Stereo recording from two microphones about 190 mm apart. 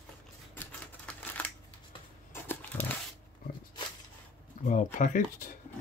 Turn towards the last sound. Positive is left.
turn(degrees=45)  # may be behind; listen again after turning